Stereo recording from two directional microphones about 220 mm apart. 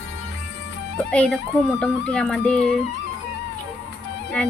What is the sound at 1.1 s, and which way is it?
Speech, 5° left (ahead or behind).